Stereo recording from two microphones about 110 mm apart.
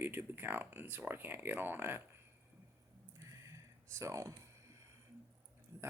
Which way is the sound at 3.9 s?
25° right (ahead or behind).